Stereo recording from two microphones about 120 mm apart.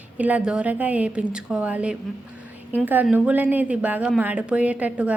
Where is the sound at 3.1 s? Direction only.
15° right (ahead or behind).